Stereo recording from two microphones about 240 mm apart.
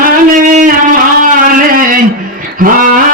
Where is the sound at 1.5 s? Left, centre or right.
Right.